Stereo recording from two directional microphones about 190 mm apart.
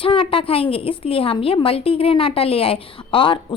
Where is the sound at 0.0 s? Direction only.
30° left (ahead or behind).